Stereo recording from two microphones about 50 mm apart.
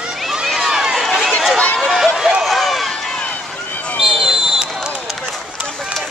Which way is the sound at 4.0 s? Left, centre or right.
Centre.